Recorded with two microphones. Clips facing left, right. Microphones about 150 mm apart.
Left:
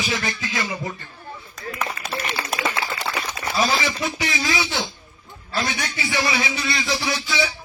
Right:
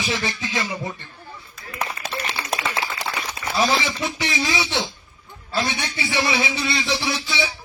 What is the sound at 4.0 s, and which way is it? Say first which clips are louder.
A man's voice: even; 25° right (ahead or behind).